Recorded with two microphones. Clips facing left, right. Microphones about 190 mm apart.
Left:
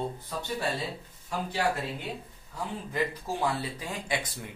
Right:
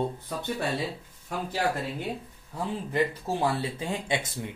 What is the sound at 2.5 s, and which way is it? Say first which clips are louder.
Speech: right 4 dB; 25° right (ahead or behind).